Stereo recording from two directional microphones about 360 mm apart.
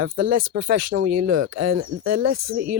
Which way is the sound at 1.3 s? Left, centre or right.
Right.